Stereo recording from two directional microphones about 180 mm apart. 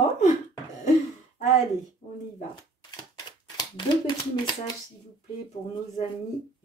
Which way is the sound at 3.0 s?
20° left (ahead or behind).